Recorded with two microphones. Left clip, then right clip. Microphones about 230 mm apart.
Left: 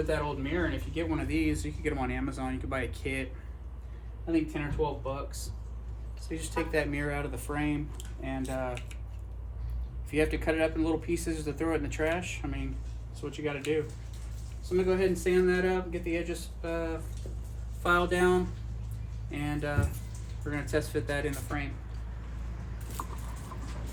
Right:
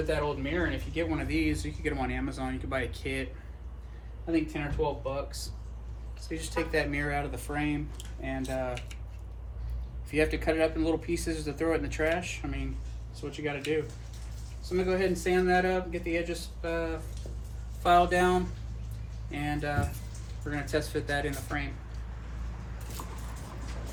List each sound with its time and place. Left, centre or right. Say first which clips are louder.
0.1 s speech: right 1 dB; centre
4.3 s speech: even; left
6.2 s speech: right 1 dB; left
10.3 s speech: right 1 dB; left
23.0 s vehicle: left 5 dB; right